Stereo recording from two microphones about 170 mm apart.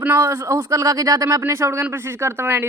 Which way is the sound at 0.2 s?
15° right (ahead or behind).